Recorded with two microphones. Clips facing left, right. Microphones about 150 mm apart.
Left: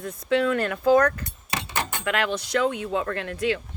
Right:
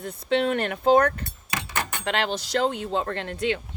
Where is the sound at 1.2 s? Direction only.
25° left (ahead or behind).